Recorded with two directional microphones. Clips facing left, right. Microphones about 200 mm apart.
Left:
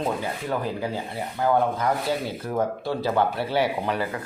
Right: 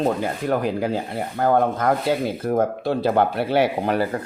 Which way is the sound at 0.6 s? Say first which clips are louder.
Right 5 dB; 65° right (ahead or behind).